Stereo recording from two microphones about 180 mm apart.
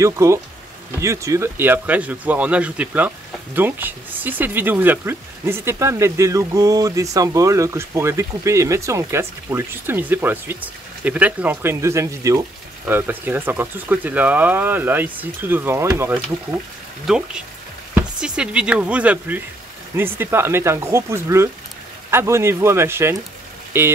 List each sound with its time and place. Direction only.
0.0 s speech: 15° right (ahead or behind)
17.0 s speech: 5° right (ahead or behind)